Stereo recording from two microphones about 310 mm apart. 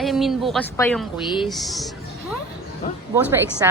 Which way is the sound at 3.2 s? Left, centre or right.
Centre.